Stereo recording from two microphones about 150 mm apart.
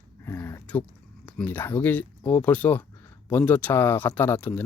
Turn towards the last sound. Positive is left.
turn(degrees=15)  # may be behind; listen again after turning